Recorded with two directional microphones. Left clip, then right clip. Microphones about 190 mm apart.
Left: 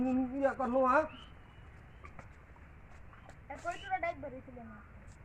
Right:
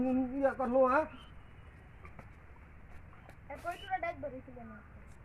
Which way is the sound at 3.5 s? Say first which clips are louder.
Left 1 dB; 50° right (ahead or behind).